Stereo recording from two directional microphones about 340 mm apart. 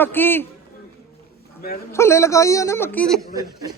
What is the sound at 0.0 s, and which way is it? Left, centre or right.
Speech, centre.